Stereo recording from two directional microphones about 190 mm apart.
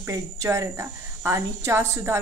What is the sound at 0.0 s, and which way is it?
A woman's voice, 15° right (ahead or behind).